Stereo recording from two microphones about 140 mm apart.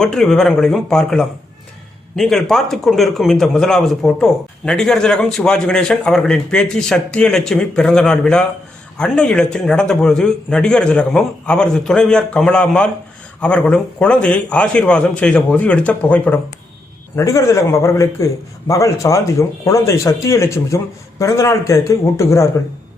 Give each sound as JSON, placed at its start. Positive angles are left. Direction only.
{"t": 0.0, "sound": "a man's voice", "side_deg": 5}
{"t": 17.2, "sound": "speech", "side_deg": 20}